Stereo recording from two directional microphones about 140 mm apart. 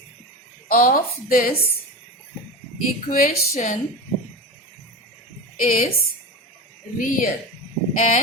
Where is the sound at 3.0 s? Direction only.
85° left.